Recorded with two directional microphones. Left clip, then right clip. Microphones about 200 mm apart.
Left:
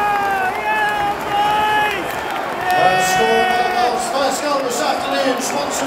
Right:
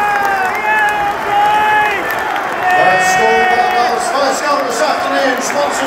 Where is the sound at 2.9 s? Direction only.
20° left (ahead or behind).